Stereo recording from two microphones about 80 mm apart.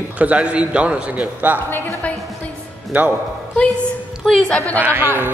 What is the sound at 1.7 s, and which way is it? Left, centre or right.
Speech, left.